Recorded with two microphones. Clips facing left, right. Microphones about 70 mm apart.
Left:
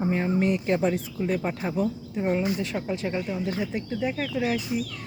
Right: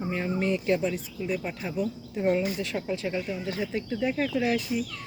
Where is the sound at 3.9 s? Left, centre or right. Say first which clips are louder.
Right 3 dB; centre.